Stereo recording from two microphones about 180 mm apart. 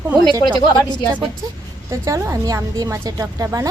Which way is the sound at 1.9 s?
15° right (ahead or behind).